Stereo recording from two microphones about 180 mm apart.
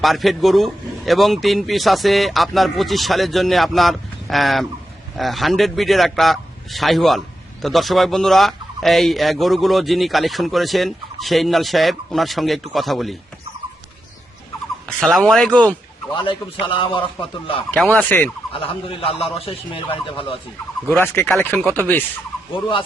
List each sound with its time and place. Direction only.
0.0 s speech: centre (ahead or behind)
14.8 s speech: centre (ahead or behind)
16.1 s a man's voice: 30° left (ahead or behind)
17.7 s chopping: 5° left (ahead or behind)
18.5 s a man's voice: 30° left (ahead or behind)
20.8 s chopping: 10° left (ahead or behind)